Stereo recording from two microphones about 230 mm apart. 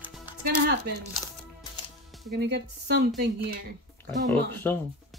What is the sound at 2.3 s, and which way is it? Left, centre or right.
Speech, right.